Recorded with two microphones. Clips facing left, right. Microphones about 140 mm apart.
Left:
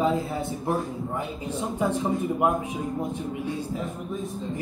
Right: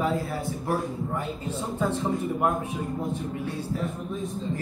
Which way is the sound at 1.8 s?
15° left (ahead or behind).